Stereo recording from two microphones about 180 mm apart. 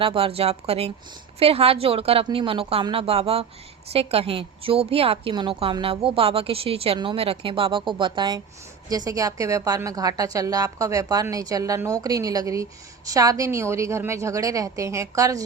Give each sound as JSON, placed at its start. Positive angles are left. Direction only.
{"t": 0.0, "sound": "a woman's voice", "side_deg": -30}